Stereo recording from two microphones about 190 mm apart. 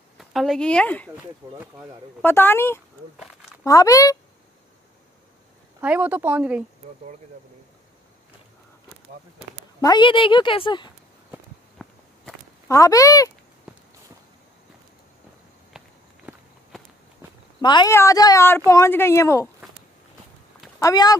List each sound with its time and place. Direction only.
0.2 s speech: centre (ahead or behind)
1.4 s speech: 20° right (ahead or behind)
2.2 s speech: 10° left (ahead or behind)
5.8 s speech: 10° right (ahead or behind)
9.8 s a woman's voice: 20° left (ahead or behind)
11.8 s walk: centre (ahead or behind)
12.6 s speech: 15° left (ahead or behind)
16.3 s walk: 10° right (ahead or behind)
17.6 s speech: 25° left (ahead or behind)
20.8 s a woman's voice: 20° left (ahead or behind)